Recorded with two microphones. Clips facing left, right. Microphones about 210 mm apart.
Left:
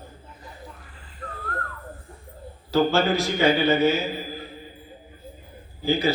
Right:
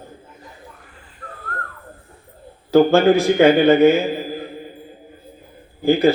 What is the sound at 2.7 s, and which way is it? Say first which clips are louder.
A man's voice: right 8 dB; 55° right (ahead or behind).